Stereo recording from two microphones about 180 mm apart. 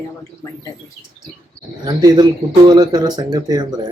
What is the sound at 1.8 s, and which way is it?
Speech, 20° right (ahead or behind).